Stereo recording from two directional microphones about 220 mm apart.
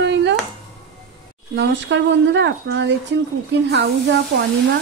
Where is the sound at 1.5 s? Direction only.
55° right (ahead or behind).